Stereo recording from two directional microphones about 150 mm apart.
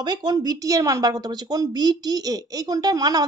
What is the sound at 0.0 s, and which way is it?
A woman's voice, 30° right (ahead or behind).